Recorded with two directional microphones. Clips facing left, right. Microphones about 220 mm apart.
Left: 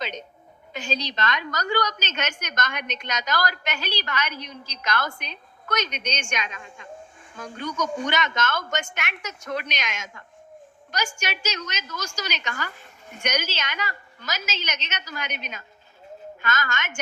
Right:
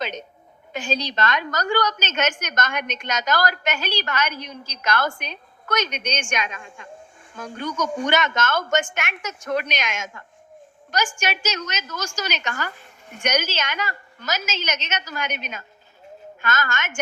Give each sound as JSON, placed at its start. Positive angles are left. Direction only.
{"t": 0.7, "sound": "a woman's voice", "side_deg": -50}
{"t": 8.0, "sound": "a woman's voice", "side_deg": -50}
{"t": 11.2, "sound": "a woman's voice", "side_deg": -50}